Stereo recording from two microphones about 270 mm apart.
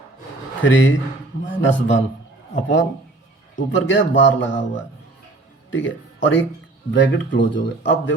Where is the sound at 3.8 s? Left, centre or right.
Left.